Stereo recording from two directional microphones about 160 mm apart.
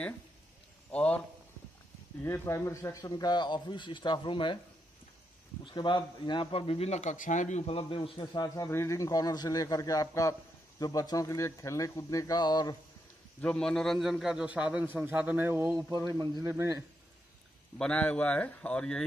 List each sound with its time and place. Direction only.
0.9 s speech: 5° left (ahead or behind)
2.2 s speech: 15° left (ahead or behind)
5.6 s speech: 30° left (ahead or behind)
13.4 s a man's voice: 5° left (ahead or behind); by 15.8 s 15° right (ahead or behind)
16.0 s a man's voice: 25° right (ahead or behind)
17.7 s speech: 5° left (ahead or behind)